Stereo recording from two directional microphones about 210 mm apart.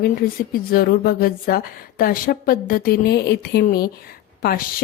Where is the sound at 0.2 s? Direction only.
45° left (ahead or behind).